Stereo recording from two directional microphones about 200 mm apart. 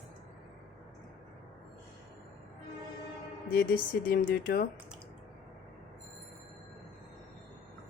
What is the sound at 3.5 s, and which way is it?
Speech, 50° left (ahead or behind).